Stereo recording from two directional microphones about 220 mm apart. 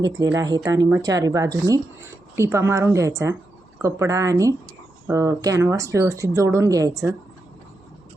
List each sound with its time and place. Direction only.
0.0 s speech: 20° right (ahead or behind)